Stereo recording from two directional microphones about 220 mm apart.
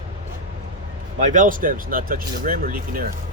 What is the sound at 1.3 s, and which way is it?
Speech, 35° right (ahead or behind).